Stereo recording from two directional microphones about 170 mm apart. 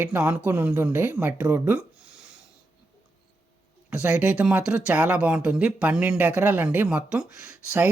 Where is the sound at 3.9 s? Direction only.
5° right (ahead or behind).